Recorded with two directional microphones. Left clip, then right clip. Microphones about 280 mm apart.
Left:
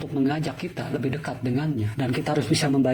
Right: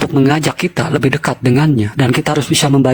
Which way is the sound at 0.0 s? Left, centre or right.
Right.